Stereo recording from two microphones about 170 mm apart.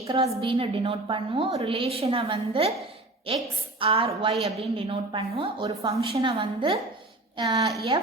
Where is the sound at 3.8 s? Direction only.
35° right (ahead or behind).